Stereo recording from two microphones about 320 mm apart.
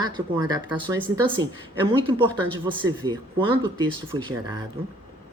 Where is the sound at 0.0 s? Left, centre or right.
Centre.